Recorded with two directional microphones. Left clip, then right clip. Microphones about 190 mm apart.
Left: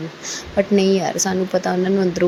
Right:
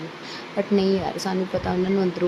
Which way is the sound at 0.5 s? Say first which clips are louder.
Left 5 dB; 15° left (ahead or behind).